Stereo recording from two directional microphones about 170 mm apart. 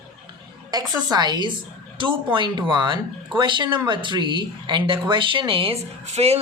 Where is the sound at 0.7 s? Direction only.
25° right (ahead or behind); by 6.4 s 40° right (ahead or behind).